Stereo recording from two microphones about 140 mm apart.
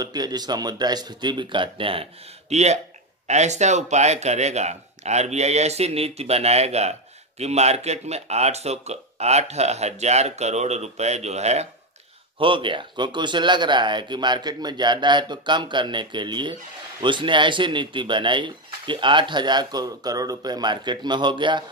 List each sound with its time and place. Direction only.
0.0 s speech: 30° right (ahead or behind)
2.5 s speech: 50° right (ahead or behind)
12.4 s speech: 35° right (ahead or behind)